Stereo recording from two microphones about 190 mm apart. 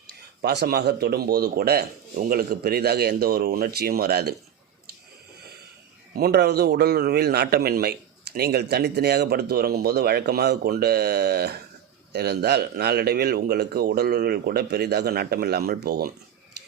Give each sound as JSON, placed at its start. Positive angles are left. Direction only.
{"t": 0.1, "sound": "a man's voice", "side_deg": -60}
{"t": 6.1, "sound": "a man's voice", "side_deg": -55}